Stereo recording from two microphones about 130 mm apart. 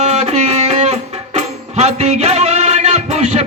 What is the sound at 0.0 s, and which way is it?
Music, 60° right (ahead or behind).